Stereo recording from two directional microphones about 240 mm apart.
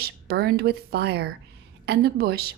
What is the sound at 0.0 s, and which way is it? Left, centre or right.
Speech, right.